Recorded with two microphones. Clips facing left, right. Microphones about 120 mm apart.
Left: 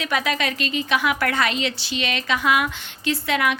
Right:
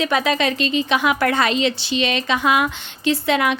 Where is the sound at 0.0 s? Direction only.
30° right (ahead or behind).